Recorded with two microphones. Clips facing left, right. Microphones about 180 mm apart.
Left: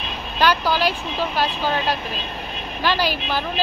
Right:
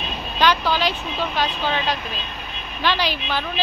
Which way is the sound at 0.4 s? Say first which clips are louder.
Left 1 dB; 10° left (ahead or behind).